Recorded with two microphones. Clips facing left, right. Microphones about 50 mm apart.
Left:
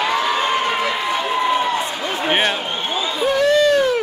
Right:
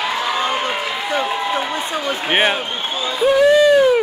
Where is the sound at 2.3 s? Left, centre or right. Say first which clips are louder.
Right 2 dB; centre.